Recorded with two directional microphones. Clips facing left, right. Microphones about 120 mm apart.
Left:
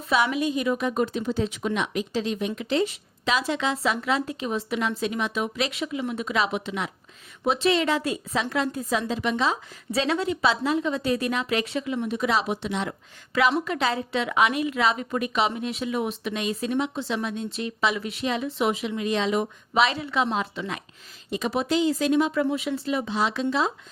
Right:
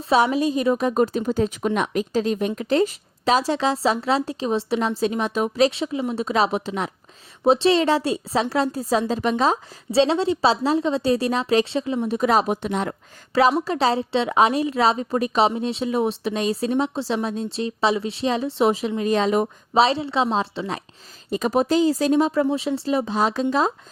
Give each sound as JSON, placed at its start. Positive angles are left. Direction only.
{"t": 0.0, "sound": "speech", "side_deg": -35}
{"t": 9.9, "sound": "speech", "side_deg": -30}
{"t": 12.0, "sound": "speech", "side_deg": -40}